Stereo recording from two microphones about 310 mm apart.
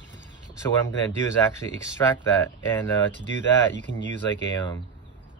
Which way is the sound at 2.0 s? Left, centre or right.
Centre.